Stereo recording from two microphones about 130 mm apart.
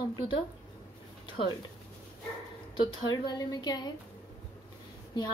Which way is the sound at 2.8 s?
35° left (ahead or behind).